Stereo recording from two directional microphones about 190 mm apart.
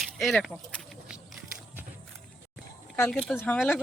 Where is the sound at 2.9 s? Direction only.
5° left (ahead or behind).